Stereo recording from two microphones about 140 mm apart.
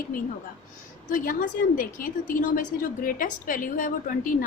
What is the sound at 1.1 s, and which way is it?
A woman's voice, 75° left (ahead or behind).